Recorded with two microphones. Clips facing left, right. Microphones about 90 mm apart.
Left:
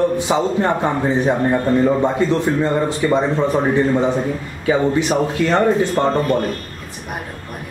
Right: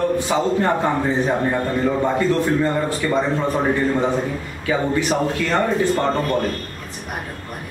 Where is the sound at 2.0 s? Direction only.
20° left (ahead or behind).